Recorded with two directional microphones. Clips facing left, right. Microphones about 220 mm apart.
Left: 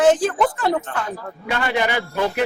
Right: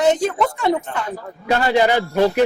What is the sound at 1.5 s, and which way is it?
Speech, 40° right (ahead or behind).